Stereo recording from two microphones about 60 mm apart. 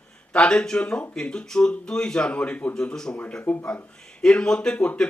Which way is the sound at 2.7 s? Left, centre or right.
Centre.